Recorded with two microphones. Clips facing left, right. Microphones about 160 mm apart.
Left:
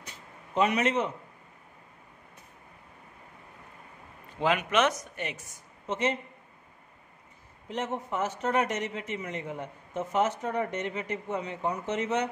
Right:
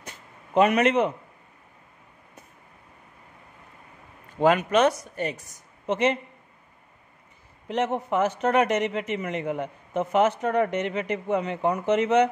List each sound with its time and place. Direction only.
0.6 s a man's voice: 65° right (ahead or behind)
4.6 s a woman's voice: 35° right (ahead or behind)
5.9 s speech: 70° right (ahead or behind)
7.6 s a man's voice: 75° right (ahead or behind)